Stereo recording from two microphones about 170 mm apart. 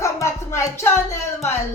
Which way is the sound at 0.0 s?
20° left (ahead or behind).